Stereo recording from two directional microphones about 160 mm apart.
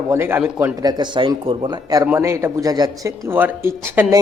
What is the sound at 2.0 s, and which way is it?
Speech, 15° right (ahead or behind).